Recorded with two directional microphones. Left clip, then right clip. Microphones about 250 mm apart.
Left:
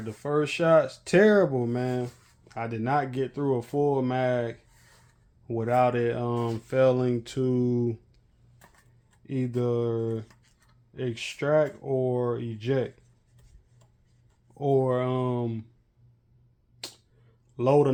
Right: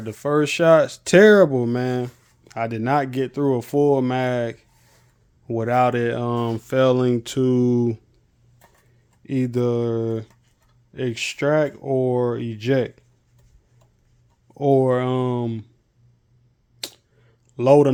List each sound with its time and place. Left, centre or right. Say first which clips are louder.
0.0 s speech: right 7 dB; right
9.2 s speech: right 7 dB; right
14.4 s speech: right 7 dB; right
16.8 s finger snapping: right 7 dB; right
17.6 s speech: right 7 dB; right